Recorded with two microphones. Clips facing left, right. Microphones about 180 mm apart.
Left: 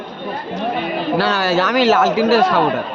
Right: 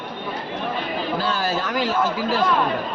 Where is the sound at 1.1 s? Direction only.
80° left.